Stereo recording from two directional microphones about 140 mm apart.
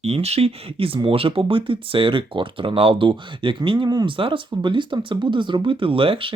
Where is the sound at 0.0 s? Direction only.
50° right (ahead or behind).